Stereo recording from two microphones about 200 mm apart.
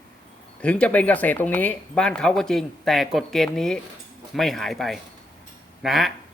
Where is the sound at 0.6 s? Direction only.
5° left (ahead or behind).